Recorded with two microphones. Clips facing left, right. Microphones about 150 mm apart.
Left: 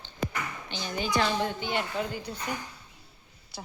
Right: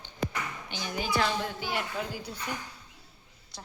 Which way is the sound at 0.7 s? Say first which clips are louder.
Left 2 dB; 10° right (ahead or behind).